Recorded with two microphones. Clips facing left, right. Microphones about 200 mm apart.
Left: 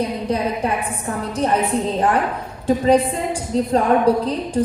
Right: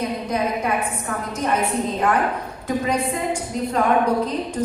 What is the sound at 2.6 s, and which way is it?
A woman's voice, 30° left (ahead or behind).